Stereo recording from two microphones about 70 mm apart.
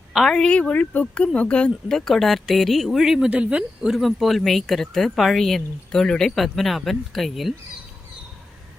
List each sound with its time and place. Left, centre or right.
0.1 s speech: centre
0.3 s speech: centre
1.9 s speech: centre
3.2 s speech: centre